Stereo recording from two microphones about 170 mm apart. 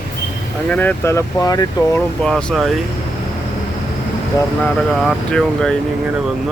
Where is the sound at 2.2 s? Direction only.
5° left (ahead or behind).